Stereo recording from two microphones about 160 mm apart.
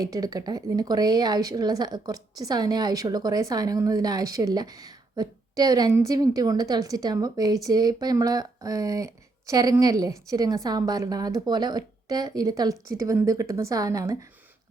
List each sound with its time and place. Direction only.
0.0 s a woman's voice: 20° right (ahead or behind)